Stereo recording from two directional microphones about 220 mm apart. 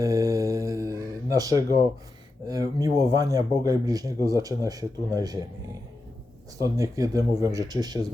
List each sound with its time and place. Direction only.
0.0 s a sound: 15° right (ahead or behind)
2.5 s speech: 15° right (ahead or behind)
6.6 s speech: 15° right (ahead or behind)